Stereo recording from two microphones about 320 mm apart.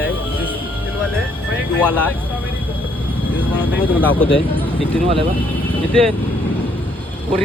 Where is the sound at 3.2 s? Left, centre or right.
Centre.